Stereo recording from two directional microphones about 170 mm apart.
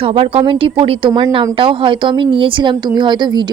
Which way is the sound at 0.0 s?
35° right (ahead or behind).